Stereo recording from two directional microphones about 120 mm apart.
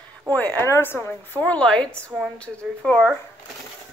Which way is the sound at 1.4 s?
10° left (ahead or behind).